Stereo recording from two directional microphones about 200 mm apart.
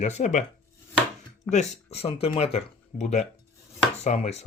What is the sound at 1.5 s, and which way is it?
Speech, 35° left (ahead or behind).